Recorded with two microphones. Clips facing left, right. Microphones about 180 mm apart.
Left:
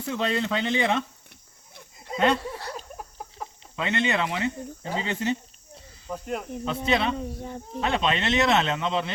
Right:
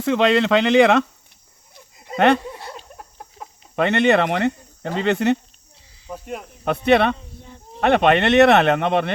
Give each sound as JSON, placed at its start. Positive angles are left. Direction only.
{"t": 0.0, "sound": "speech", "side_deg": -80}
{"t": 2.1, "sound": "speech", "side_deg": -70}
{"t": 2.5, "sound": "a sound", "side_deg": -20}
{"t": 2.7, "sound": "a sound", "side_deg": 0}
{"t": 3.8, "sound": "speech", "side_deg": -65}
{"t": 6.1, "sound": "speech", "side_deg": 0}
{"t": 6.7, "sound": "speech", "side_deg": -65}